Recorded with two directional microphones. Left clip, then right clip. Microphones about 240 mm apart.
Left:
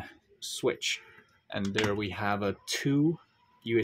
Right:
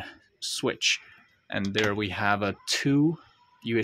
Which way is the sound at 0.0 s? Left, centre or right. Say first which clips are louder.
Right 6 dB; centre.